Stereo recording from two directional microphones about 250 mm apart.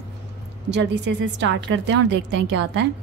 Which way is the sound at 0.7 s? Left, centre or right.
Right.